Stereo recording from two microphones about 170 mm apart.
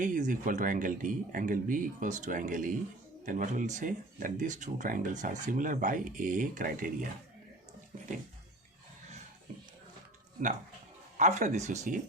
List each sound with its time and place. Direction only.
0.0 s speech: 50° right (ahead or behind)
11.2 s speech: 45° right (ahead or behind)